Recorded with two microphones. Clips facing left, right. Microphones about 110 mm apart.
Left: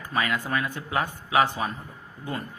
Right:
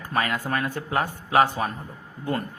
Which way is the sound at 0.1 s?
45° right (ahead or behind).